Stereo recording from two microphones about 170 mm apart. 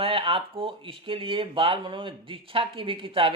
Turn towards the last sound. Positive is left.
turn(degrees=-30)  # may be behind; listen again after turning